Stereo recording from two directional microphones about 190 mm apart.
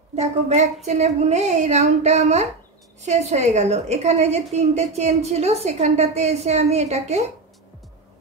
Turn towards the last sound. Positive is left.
turn(degrees=-35)  # may be behind; listen again after turning